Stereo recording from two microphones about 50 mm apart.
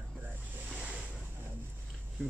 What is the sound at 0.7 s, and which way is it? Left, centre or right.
Ocean, right.